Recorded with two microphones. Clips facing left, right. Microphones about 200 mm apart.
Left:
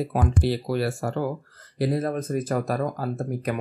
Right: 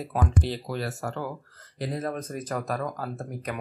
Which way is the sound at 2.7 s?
30° left (ahead or behind).